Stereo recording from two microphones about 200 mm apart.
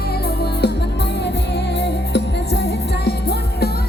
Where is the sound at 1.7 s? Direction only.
60° left (ahead or behind).